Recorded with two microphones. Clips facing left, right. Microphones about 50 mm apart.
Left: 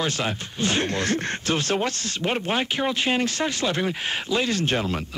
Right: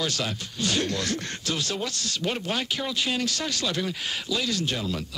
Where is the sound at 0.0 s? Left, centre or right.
Left.